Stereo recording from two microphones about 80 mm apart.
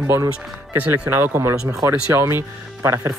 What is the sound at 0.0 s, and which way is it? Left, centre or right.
Speech, right.